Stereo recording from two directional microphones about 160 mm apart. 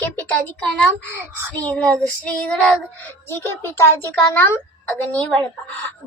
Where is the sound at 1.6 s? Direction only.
10° left (ahead or behind).